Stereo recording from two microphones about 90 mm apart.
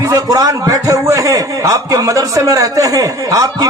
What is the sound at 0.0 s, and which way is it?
A man's voice, 40° right (ahead or behind).